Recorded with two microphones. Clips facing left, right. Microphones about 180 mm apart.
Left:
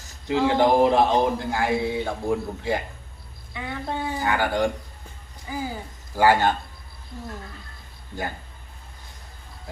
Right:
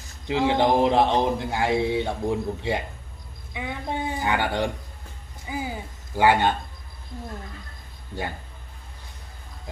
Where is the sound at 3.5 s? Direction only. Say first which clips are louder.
Even; 15° right (ahead or behind).